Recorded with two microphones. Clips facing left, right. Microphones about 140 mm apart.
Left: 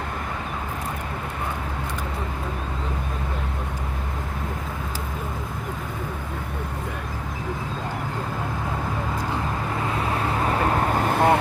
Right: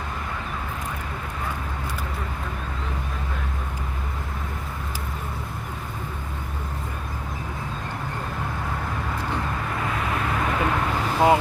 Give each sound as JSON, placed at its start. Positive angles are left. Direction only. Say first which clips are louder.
{"t": 9.9, "sound": "vehicle", "louder": "left 1 dB", "side_deg": 30}
{"t": 10.9, "sound": "vehicle", "louder": "right 2 dB", "side_deg": 55}